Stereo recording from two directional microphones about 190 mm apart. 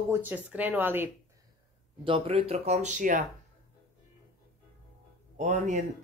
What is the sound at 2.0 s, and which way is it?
Speech, 25° right (ahead or behind).